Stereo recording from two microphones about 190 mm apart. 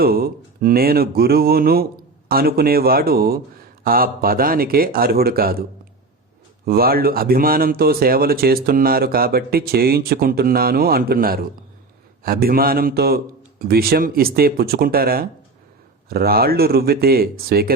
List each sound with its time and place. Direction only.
0.0 s speech: 50° right (ahead or behind)
6.7 s speech: 50° right (ahead or behind)